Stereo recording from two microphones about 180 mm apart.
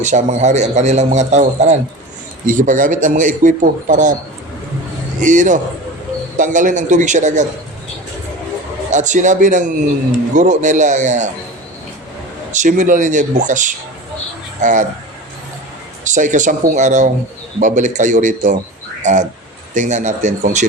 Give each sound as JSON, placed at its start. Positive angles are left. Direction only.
{"t": 0.0, "sound": "a man's voice", "side_deg": -40}
{"t": 5.2, "sound": "a man's voice", "side_deg": -45}
{"t": 8.9, "sound": "a man's voice", "side_deg": -45}
{"t": 12.5, "sound": "a man's voice", "side_deg": -45}
{"t": 16.0, "sound": "a man's voice", "side_deg": -45}